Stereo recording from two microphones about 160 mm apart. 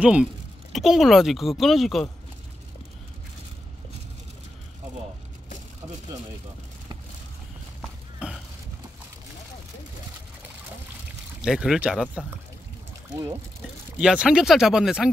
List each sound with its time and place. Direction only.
0.0 s a woman's voice: 5° right (ahead or behind)
8.2 s a sound: 5° right (ahead or behind)
11.4 s speech: 5° right (ahead or behind)
13.1 s speech: 20° right (ahead or behind)
13.9 s speech: 5° right (ahead or behind)